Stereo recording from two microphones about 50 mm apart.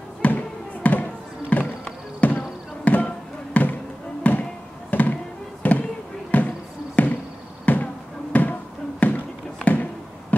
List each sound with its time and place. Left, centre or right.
0.2 s music: left
0.8 s basketball bounce: left
5.6 s a sound: left
6.3 s basketball bounce: left
7.0 s a sound: left
7.6 s basketball bounce: left